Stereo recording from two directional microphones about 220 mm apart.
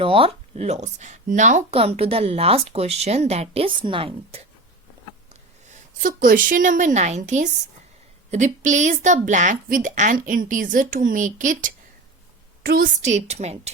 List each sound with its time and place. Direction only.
0.0 s a woman's voice: 25° right (ahead or behind)